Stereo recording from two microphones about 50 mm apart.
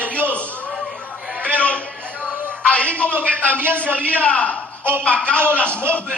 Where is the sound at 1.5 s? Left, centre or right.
Left.